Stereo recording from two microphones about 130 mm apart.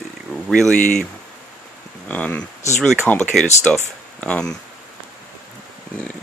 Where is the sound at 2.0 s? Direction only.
10° left (ahead or behind).